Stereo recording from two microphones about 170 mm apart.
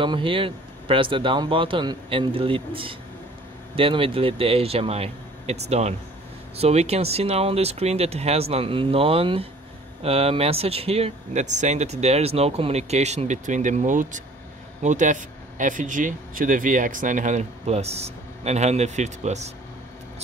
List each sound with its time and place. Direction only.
0.0 s speech: 30° right (ahead or behind)